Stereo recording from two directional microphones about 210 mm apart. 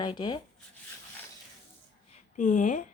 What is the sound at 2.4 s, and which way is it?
Speech, 35° left (ahead or behind).